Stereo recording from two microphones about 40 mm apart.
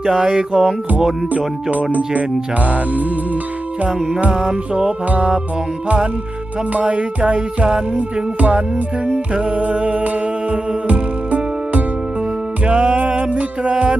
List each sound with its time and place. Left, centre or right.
0.0 s music: centre
1.7 s music: right
4.2 s music: right
5.0 s music: right
6.7 s music: right